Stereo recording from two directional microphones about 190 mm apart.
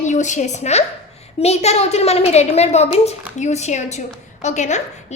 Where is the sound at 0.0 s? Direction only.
40° left (ahead or behind).